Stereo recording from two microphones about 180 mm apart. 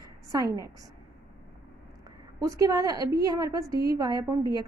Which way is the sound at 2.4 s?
20° right (ahead or behind).